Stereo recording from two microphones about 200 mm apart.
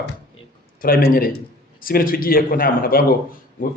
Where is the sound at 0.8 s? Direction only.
45° left (ahead or behind).